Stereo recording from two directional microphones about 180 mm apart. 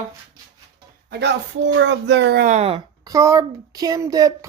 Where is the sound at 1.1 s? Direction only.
75° right (ahead or behind).